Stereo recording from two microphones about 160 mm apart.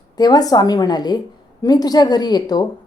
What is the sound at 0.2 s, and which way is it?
A woman's voice, 25° left (ahead or behind).